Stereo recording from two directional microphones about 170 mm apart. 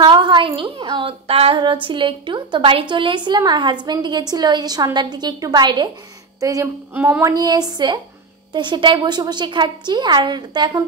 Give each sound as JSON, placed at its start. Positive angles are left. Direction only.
{"t": 0.0, "sound": "a woman's voice", "side_deg": -30}